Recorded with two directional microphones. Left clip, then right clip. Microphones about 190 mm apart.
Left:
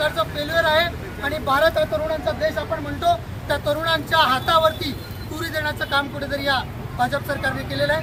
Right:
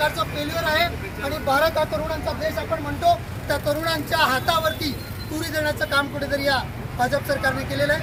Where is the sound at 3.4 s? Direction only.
15° right (ahead or behind).